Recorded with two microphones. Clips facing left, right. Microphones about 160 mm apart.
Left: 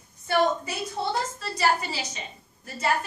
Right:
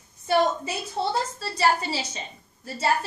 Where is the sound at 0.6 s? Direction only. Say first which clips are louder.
Right 2 dB; 30° right (ahead or behind).